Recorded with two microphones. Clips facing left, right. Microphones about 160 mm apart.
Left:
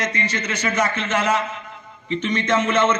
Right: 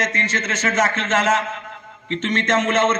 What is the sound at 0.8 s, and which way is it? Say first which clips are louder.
Speech: right 2 dB; 90° right.